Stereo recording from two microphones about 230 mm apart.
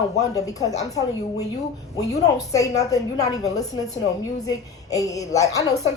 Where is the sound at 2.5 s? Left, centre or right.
Centre.